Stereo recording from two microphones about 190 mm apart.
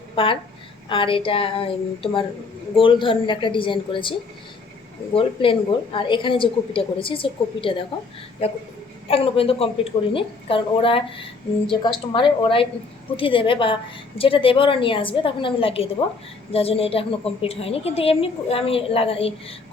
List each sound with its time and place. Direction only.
0.2 s a woman's voice: 30° left (ahead or behind)
5.1 s a woman's voice: 25° left (ahead or behind)